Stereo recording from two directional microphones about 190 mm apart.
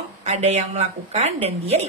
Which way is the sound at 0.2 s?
35° right (ahead or behind).